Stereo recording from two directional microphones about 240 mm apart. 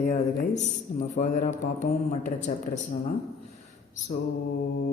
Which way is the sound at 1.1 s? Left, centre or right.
Left.